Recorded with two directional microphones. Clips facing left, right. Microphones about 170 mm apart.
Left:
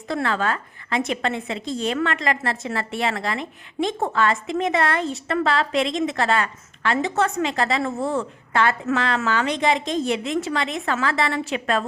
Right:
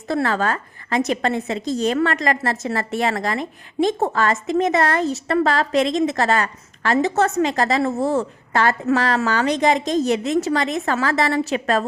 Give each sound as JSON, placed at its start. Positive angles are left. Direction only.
{"t": 0.1, "sound": "a woman's voice", "side_deg": -40}